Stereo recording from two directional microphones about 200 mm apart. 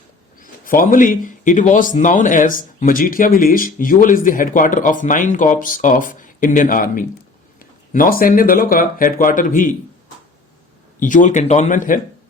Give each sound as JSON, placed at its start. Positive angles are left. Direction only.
{"t": 0.3, "sound": "speech", "side_deg": 45}
{"t": 11.0, "sound": "speech", "side_deg": 40}